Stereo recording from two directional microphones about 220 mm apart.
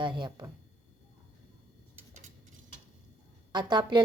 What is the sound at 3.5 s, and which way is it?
Speech, 20° right (ahead or behind).